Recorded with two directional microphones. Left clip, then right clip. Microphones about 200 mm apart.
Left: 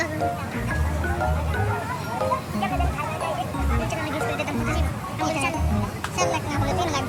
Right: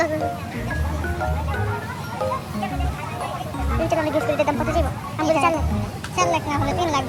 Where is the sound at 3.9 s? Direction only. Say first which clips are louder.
Right 10 dB; 5° right (ahead or behind).